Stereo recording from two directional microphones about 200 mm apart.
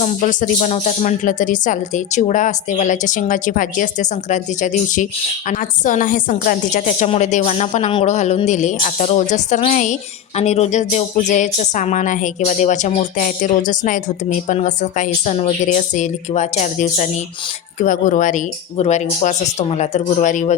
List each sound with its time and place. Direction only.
0.0 s a woman's voice: 40° left (ahead or behind)